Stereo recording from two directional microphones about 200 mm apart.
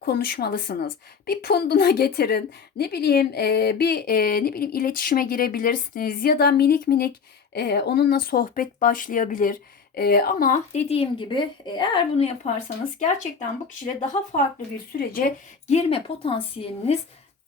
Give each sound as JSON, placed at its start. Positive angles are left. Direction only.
{"t": 0.0, "sound": "a woman's voice", "side_deg": 50}
{"t": 13.0, "sound": "a woman's voice", "side_deg": 35}
{"t": 14.9, "sound": "a woman's voice", "side_deg": 45}